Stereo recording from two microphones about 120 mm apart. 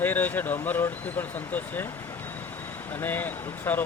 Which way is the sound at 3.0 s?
15° left (ahead or behind).